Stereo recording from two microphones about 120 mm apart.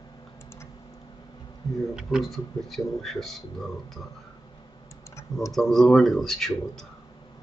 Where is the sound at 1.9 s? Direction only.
Centre (ahead or behind).